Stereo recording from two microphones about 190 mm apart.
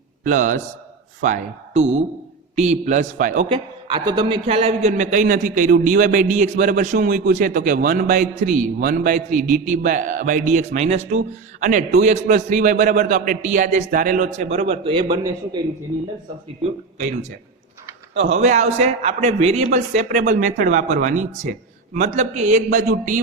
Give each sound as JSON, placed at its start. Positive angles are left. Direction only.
{"t": 0.3, "sound": "a man's voice", "side_deg": -40}
{"t": 3.5, "sound": "a man's voice", "side_deg": -25}
{"t": 17.0, "sound": "a man's voice", "side_deg": -40}